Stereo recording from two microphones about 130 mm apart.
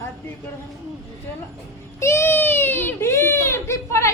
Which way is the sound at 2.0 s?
20° left (ahead or behind).